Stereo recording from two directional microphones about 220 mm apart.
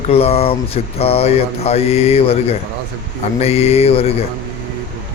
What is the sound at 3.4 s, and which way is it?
Speech, 25° left (ahead or behind).